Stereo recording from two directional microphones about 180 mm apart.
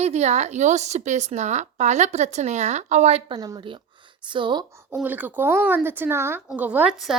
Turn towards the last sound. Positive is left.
turn(degrees=-5)  # may be behind; listen again after turning